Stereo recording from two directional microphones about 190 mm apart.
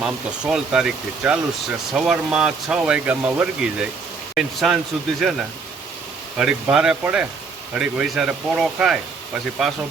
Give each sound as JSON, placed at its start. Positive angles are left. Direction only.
{"t": 0.0, "sound": "speech", "side_deg": -5}